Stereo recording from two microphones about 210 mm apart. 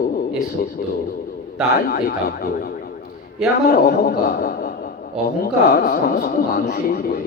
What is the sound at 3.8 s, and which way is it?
A man's voice, 45° left (ahead or behind).